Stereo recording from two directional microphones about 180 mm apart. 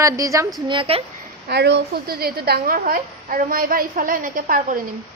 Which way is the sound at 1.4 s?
70° right (ahead or behind).